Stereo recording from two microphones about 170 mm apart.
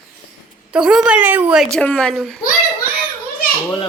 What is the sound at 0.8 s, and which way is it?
A woman's voice, 5° right (ahead or behind).